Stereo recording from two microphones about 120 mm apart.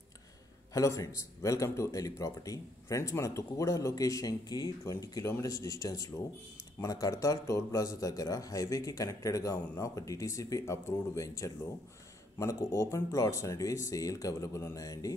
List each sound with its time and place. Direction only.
0.7 s a man's voice: 25° left (ahead or behind)